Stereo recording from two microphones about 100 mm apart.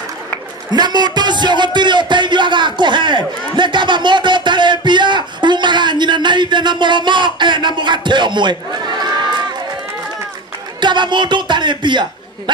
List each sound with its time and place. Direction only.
0.7 s music: 45° right (ahead or behind)
10.8 s a man's voice: 50° right (ahead or behind)